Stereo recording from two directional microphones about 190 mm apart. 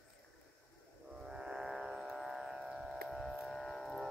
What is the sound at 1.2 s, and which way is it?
Music, 5° right (ahead or behind).